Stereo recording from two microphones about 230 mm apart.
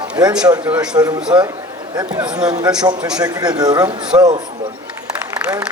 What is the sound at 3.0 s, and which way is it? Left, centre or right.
Speech, centre.